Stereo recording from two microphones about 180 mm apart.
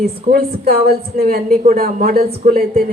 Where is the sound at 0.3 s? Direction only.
60° right (ahead or behind).